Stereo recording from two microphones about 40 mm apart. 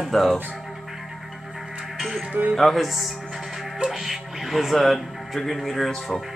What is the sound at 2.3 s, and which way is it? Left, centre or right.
Speech, right.